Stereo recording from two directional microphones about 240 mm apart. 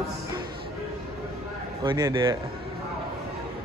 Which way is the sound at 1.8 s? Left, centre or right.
Centre.